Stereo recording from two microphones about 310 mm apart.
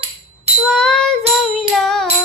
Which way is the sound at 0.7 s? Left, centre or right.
Centre.